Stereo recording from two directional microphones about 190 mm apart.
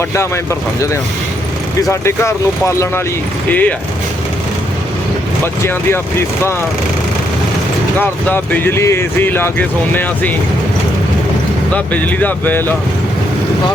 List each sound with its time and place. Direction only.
1.9 s speech: 15° left (ahead or behind)
5.6 s speech: 10° left (ahead or behind)
8.3 s speech: 10° left (ahead or behind)
11.7 s speech: 10° left (ahead or behind)